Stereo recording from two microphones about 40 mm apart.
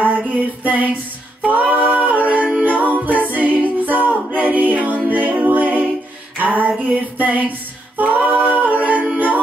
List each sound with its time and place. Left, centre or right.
0.3 s female singing: right
1.4 s music: right
4.3 s a capella: right
6.3 s female singing: right
8.0 s singing: right